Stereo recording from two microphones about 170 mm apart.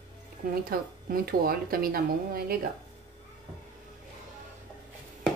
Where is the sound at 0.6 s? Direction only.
60° right (ahead or behind).